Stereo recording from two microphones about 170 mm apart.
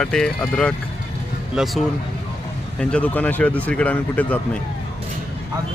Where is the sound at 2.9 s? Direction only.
10° left (ahead or behind).